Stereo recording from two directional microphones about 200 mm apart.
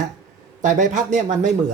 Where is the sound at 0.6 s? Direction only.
40° right (ahead or behind).